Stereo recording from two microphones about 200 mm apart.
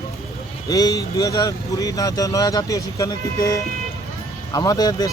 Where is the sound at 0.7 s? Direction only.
20° left (ahead or behind).